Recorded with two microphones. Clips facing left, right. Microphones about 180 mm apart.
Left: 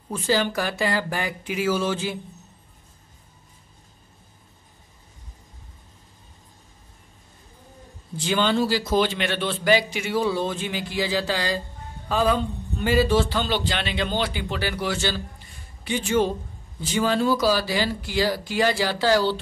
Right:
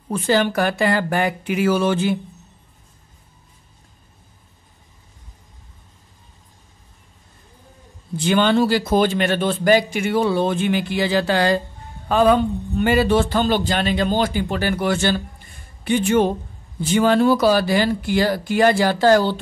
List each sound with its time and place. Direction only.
0.1 s a man's voice: 60° right (ahead or behind)
8.2 s a man's voice: 60° right (ahead or behind)